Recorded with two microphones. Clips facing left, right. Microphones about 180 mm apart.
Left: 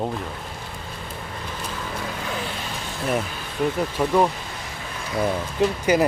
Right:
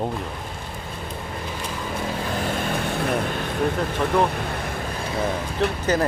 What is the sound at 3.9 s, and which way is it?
Speech, 60° right (ahead or behind).